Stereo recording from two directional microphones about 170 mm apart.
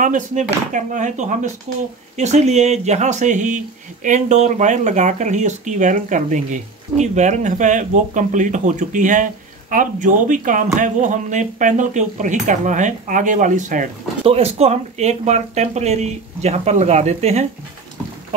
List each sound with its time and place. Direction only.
0.0 s speech: 45° right (ahead or behind)
14.2 s speech: 40° right (ahead or behind)